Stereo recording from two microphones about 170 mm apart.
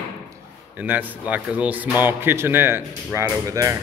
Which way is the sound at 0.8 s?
10° right (ahead or behind).